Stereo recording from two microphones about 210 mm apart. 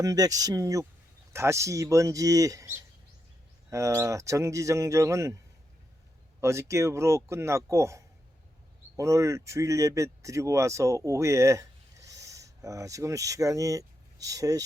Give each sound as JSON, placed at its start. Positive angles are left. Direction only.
{"t": 0.0, "sound": "speech", "side_deg": -15}
{"t": 6.4, "sound": "speech", "side_deg": -15}